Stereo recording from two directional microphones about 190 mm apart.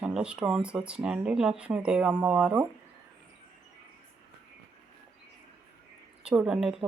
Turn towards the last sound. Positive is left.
turn(degrees=-5)  # may be behind; listen again after turning